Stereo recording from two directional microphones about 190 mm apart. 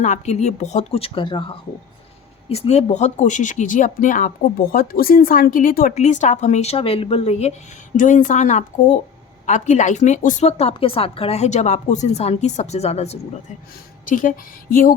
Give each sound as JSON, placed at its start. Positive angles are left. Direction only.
{"t": 0.0, "sound": "speech", "side_deg": 40}